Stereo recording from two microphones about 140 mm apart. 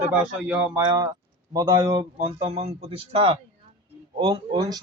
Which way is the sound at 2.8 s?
40° right (ahead or behind).